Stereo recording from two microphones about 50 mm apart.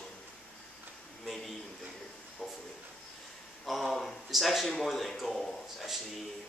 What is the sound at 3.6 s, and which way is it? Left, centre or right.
A man's voice, centre.